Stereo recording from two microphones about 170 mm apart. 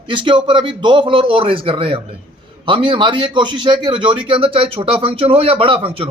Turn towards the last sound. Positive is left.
turn(degrees=-30)  # may be behind; listen again after turning